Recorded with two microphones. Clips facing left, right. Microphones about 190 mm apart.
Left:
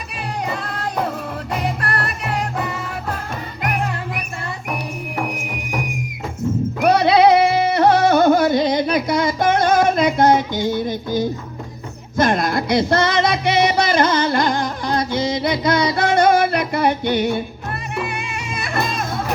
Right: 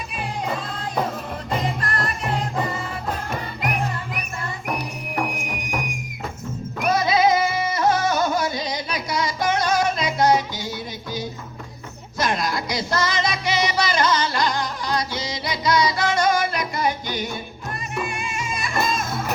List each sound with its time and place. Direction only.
6.8 s music: 65° left (ahead or behind)